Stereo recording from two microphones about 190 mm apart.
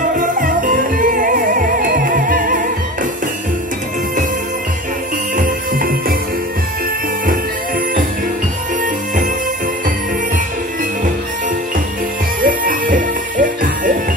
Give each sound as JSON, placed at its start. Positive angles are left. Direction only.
{"t": 0.2, "sound": "music", "side_deg": -45}
{"t": 5.3, "sound": "music", "side_deg": -45}
{"t": 12.4, "sound": "music", "side_deg": -45}